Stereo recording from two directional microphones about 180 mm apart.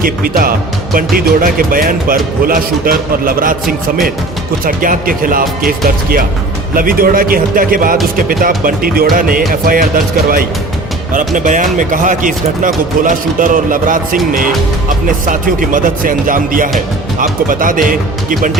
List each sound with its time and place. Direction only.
0.0 s speech: 50° right (ahead or behind)